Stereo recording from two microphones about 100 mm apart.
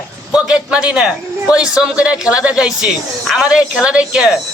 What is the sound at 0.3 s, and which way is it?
A man's voice, 10° right (ahead or behind).